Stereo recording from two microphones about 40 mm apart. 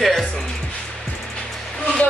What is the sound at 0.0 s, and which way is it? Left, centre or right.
Music, centre.